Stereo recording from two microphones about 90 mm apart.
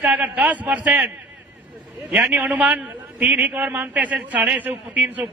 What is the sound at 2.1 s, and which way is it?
A man's voice, 15° right (ahead or behind).